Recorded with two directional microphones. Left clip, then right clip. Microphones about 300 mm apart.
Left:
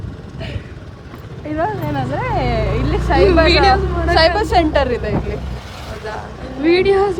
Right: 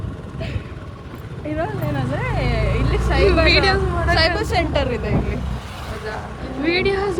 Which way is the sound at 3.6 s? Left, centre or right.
Centre.